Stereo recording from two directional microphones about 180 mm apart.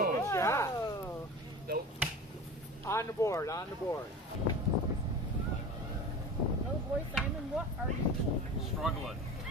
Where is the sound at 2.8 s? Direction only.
15° left (ahead or behind).